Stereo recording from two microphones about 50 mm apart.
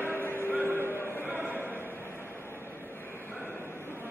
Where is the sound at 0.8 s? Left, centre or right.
Left.